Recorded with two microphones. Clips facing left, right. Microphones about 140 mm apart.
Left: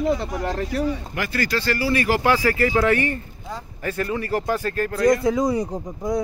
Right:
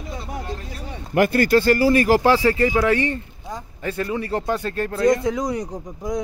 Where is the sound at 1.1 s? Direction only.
50° right (ahead or behind); by 4.5 s 20° right (ahead or behind).